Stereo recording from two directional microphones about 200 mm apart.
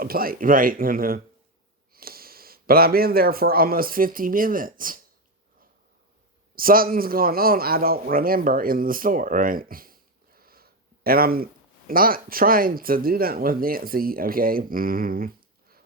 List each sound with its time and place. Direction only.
0.0 s a man's voice: 45° right (ahead or behind)
6.6 s a man's voice: 45° right (ahead or behind)